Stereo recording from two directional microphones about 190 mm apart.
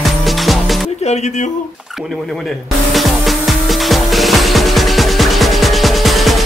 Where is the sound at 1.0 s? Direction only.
35° left (ahead or behind).